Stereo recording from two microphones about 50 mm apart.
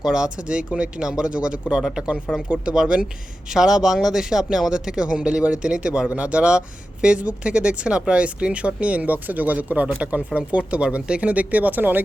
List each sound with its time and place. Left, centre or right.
0.0 s speech: centre; by 12.0 s right